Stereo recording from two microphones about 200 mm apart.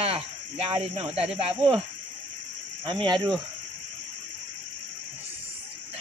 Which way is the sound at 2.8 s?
25° right (ahead or behind).